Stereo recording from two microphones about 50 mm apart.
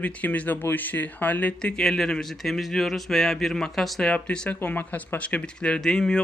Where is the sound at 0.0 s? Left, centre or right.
Left.